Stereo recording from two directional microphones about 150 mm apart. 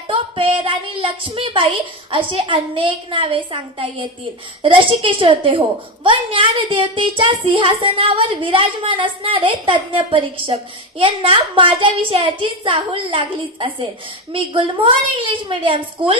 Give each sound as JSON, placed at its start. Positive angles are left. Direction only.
{"t": 0.1, "sound": "speech", "side_deg": -35}